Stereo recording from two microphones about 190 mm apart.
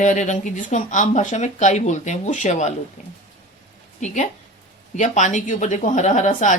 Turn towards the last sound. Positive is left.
turn(degrees=40)  # may be behind; listen again after turning